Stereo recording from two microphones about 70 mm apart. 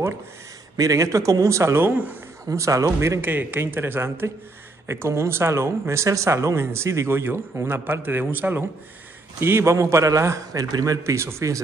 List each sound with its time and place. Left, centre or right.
0.7 s a man's voice: right
2.4 s a man's voice: right
3.2 s a man's voice: right
11.1 s a man's voice: right